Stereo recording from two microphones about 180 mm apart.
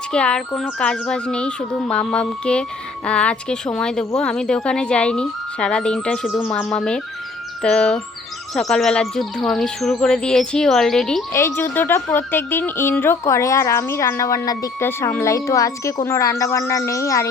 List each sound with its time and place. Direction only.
0.1 s speech: 5° left (ahead or behind)
11.3 s speech: 15° left (ahead or behind)